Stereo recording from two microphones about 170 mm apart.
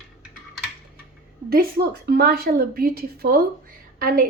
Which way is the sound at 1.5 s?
70° right (ahead or behind).